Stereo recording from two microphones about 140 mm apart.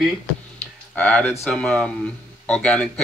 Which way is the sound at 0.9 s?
10° left (ahead or behind).